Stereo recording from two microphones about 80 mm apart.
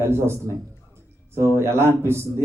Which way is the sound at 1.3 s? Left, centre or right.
Right.